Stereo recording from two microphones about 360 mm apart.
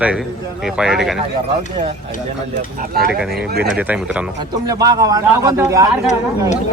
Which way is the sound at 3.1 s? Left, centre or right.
Centre.